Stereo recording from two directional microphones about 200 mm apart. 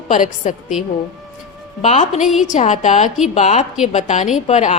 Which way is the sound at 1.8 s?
35° left (ahead or behind).